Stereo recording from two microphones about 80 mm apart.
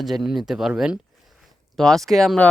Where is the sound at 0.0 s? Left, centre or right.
Centre.